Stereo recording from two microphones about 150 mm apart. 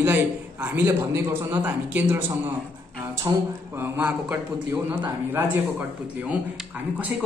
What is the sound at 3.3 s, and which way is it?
Speech, 20° right (ahead or behind).